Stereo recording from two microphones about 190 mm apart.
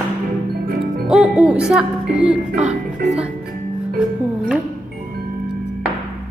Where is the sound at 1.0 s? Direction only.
5° right (ahead or behind).